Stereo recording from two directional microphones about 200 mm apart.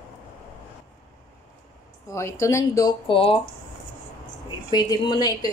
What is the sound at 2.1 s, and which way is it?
A woman's voice, 15° left (ahead or behind).